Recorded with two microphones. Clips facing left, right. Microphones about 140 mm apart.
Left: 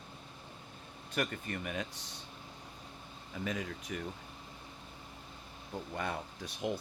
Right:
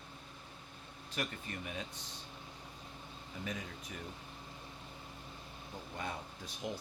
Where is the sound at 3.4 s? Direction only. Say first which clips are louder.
Left 6 dB; 90° left.